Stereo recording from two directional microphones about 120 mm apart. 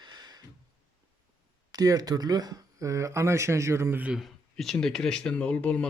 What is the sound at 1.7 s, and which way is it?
Speech, 30° right (ahead or behind).